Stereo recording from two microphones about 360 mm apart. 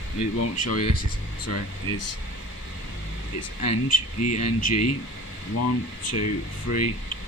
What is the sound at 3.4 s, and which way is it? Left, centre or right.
Speech, left.